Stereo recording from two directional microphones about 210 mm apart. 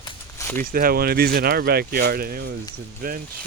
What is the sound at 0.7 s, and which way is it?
Speech, 45° right (ahead or behind).